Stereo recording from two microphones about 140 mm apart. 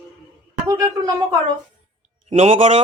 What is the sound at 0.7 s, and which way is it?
Speech, 25° right (ahead or behind).